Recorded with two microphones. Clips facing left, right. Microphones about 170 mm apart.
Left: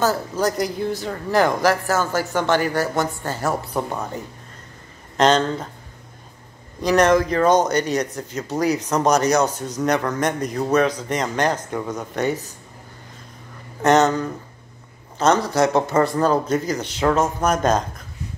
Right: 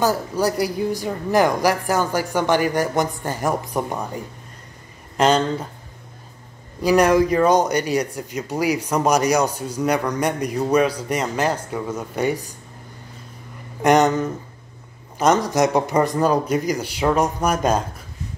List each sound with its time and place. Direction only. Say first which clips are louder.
0.0 s a woman's voice: right 1 dB; 10° right (ahead or behind)
6.8 s a woman's voice: right 1 dB; 10° right (ahead or behind)
13.8 s a woman's voice: even; 15° right (ahead or behind)